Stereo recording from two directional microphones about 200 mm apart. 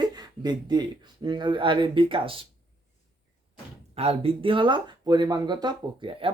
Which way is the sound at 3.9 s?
30° right (ahead or behind).